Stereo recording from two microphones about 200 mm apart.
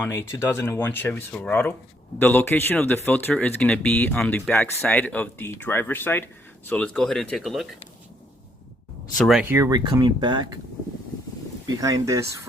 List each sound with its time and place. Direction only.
0.0 s speech: 10° left (ahead or behind)
9.1 s speech: centre (ahead or behind); by 10.5 s 20° right (ahead or behind)
11.8 s speech: 15° right (ahead or behind)